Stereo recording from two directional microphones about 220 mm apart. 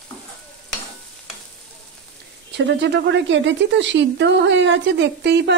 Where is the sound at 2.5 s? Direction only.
50° right (ahead or behind).